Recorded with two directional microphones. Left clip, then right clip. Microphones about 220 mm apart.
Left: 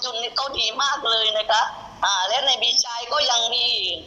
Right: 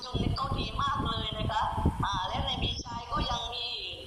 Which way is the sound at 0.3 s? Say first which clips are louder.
Left 11 dB; 45° left (ahead or behind).